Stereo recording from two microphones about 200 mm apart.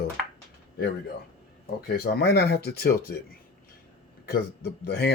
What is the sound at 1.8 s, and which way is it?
Speech, 50° left (ahead or behind).